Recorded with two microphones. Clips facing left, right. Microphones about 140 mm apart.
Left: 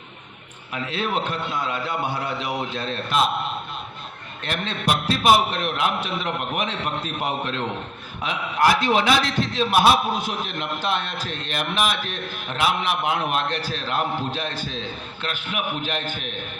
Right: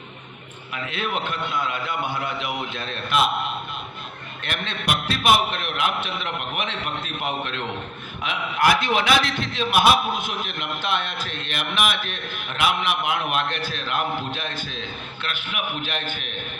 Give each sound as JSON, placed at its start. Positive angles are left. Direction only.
{"t": 0.7, "sound": "a man's voice", "side_deg": 35}
{"t": 4.4, "sound": "a man's voice", "side_deg": 35}